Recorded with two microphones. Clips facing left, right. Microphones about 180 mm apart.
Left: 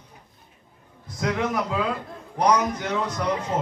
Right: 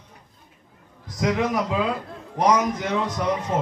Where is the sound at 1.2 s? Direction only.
20° right (ahead or behind).